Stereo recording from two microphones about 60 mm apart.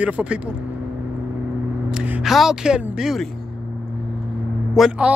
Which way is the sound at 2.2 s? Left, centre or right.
Centre.